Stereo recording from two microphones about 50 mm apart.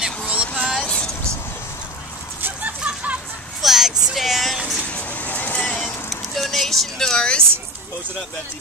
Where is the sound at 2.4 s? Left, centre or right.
Right.